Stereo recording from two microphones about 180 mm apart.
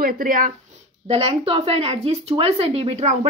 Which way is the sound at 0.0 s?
50° right (ahead or behind).